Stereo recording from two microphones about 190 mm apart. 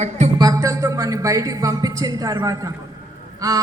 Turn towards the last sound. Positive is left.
turn(degrees=-20)  # may be behind; listen again after turning